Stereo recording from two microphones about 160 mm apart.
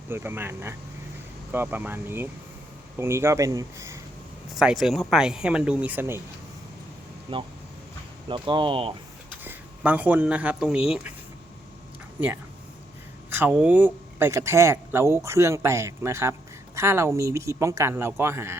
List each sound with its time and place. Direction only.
0.1 s speech: 15° right (ahead or behind)
4.5 s speech: centre (ahead or behind)
8.3 s speech: 30° right (ahead or behind)
9.4 s speech: 10° right (ahead or behind)
13.3 s speech: 10° right (ahead or behind)